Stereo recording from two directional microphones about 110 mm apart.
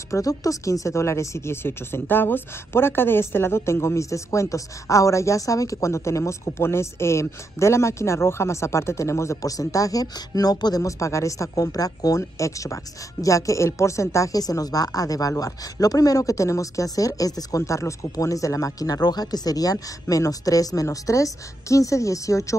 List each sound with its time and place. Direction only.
0.1 s speech: 30° left (ahead or behind)